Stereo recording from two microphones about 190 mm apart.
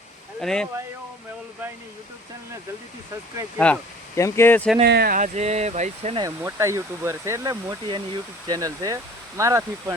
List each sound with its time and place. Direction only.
0.3 s speech: 5° left (ahead or behind)
3.6 s speech: 10° left (ahead or behind)
4.9 s speech: 55° right (ahead or behind); by 6.2 s 35° right (ahead or behind)
6.2 s speech: 15° right (ahead or behind)